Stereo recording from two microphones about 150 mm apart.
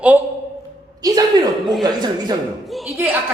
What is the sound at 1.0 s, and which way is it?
Speech, 25° right (ahead or behind).